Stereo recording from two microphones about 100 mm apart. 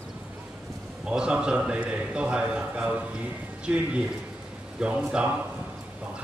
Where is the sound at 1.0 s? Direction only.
10° right (ahead or behind).